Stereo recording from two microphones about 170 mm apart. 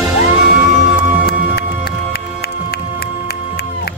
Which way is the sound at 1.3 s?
70° left (ahead or behind).